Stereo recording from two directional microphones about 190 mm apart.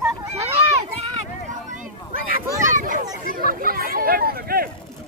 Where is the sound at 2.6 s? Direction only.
45° right (ahead or behind).